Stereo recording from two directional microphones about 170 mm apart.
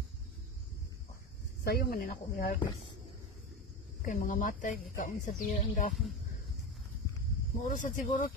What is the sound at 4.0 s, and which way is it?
Speech, 50° left (ahead or behind).